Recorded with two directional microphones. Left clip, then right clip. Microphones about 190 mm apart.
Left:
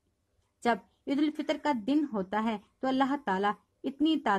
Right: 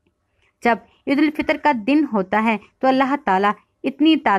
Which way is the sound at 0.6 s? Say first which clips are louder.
Right 10 dB; 30° right (ahead or behind).